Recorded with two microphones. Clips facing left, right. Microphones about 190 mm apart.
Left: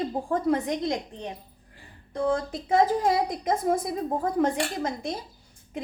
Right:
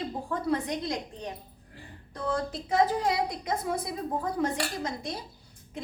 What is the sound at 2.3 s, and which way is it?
A woman's voice, 50° left (ahead or behind).